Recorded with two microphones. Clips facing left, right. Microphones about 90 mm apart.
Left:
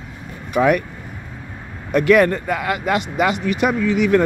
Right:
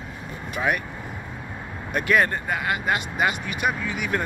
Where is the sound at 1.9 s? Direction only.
85° left.